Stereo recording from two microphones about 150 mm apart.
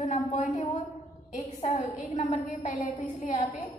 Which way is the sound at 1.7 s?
50° left (ahead or behind).